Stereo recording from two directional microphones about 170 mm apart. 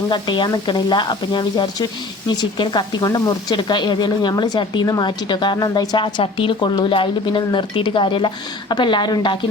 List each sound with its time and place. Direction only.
0.1 s speech: 25° left (ahead or behind)